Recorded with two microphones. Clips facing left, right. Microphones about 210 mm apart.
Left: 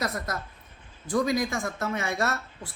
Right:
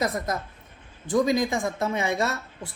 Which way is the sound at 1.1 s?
20° right (ahead or behind).